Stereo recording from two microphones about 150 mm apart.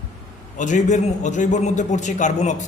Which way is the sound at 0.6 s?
55° left (ahead or behind).